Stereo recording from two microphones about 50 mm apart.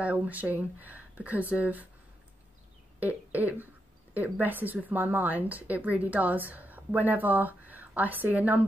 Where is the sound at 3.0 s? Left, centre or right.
Right.